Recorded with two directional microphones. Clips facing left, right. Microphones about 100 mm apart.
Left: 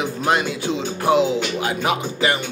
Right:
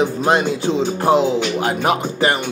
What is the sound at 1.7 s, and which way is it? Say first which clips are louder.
Music: right 4 dB; 45° right (ahead or behind).